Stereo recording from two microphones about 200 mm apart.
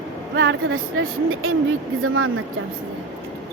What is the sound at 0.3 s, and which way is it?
Speech, 75° right (ahead or behind).